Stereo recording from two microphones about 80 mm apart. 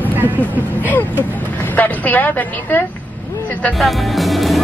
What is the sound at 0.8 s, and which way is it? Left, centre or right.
A woman's voice, left.